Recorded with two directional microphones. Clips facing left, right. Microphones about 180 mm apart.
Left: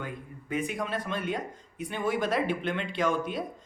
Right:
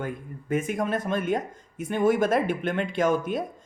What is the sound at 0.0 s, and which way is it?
Speech, 45° right (ahead or behind).